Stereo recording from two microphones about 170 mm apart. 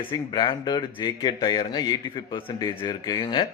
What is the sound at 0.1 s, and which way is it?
Speech, 30° left (ahead or behind).